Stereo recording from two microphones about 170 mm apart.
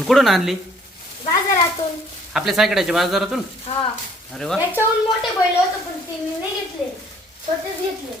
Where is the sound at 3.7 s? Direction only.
40° left (ahead or behind).